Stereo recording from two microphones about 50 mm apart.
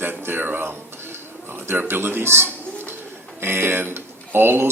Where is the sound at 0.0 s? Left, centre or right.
Right.